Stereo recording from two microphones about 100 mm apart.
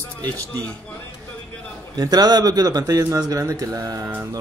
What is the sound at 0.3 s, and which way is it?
Speech, 15° left (ahead or behind).